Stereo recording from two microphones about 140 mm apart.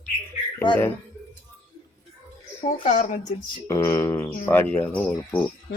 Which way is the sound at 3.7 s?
20° left (ahead or behind).